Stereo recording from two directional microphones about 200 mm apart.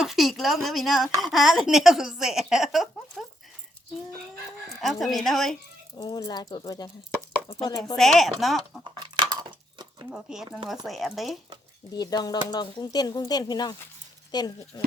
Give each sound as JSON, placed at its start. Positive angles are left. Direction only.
{"t": 0.0, "sound": "a woman's voice", "side_deg": 0}
{"t": 4.8, "sound": "speech", "side_deg": 0}
{"t": 6.0, "sound": "speech", "side_deg": 20}
{"t": 7.9, "sound": "speech", "side_deg": 0}
{"t": 8.8, "sound": "a sound", "side_deg": -25}
{"t": 10.1, "sound": "speech", "side_deg": -5}
{"t": 11.9, "sound": "speech", "side_deg": 20}